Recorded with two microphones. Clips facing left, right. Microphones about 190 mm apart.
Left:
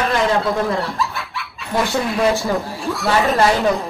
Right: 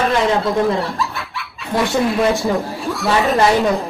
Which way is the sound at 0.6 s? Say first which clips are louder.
Right 3 dB; centre (ahead or behind).